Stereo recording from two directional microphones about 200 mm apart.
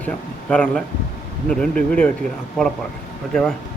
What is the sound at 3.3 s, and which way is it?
Speech, 5° left (ahead or behind).